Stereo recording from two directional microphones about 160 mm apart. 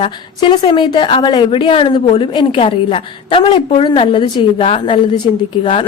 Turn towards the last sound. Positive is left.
turn(degrees=35)  # may be behind; listen again after turning